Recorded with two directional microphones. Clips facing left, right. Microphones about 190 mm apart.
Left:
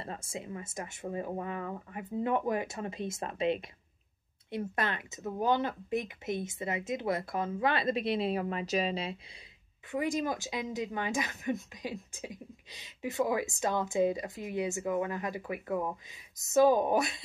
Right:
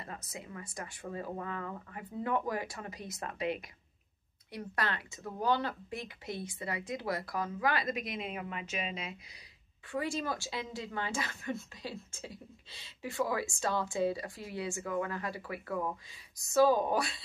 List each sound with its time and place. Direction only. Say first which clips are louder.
0.0 s speech: left 5 dB; 25° left (ahead or behind)
9.8 s speech: left 3 dB; 20° left (ahead or behind)